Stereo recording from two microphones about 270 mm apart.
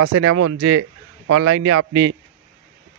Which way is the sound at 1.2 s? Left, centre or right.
Right.